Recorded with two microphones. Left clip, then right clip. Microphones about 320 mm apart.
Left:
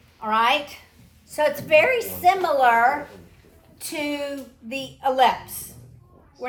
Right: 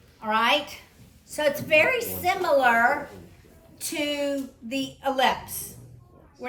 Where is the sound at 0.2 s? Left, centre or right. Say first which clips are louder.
Left 2 dB; centre.